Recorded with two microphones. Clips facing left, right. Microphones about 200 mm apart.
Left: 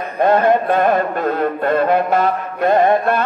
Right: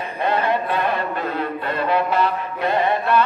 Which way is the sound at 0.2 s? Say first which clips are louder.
Left 7 dB; 50° left (ahead or behind).